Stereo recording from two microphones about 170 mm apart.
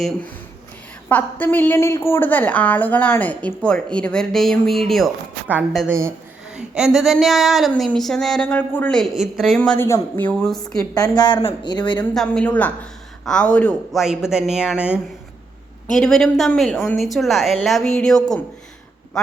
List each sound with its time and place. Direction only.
1.0 s a woman's voice: 10° left (ahead or behind)
11.2 s speech: 25° left (ahead or behind)
11.9 s speech: 5° left (ahead or behind)